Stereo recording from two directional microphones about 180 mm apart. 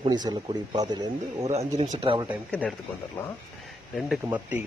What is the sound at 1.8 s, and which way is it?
Speech, 35° right (ahead or behind).